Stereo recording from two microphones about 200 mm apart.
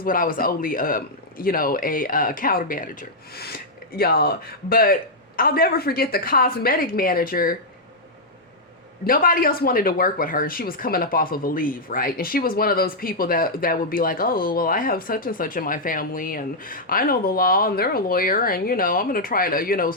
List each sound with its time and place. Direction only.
0.0 s speech: 45° left (ahead or behind)
9.0 s speech: 45° left (ahead or behind)